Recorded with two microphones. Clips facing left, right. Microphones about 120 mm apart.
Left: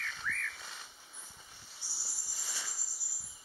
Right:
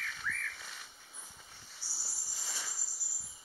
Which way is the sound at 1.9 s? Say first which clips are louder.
Right 1 dB; centre (ahead or behind).